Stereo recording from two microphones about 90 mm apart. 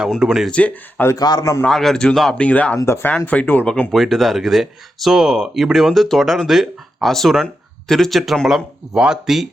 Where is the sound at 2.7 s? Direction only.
30° left (ahead or behind).